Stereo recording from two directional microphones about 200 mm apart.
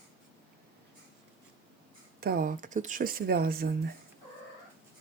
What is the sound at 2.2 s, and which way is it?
Speech, 50° right (ahead or behind).